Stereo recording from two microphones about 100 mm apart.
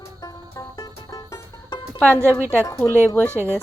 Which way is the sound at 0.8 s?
40° left (ahead or behind).